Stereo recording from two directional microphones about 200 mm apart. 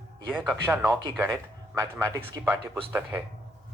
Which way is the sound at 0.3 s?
Centre (ahead or behind).